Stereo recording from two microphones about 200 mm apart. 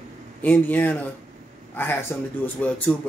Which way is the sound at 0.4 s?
10° left (ahead or behind).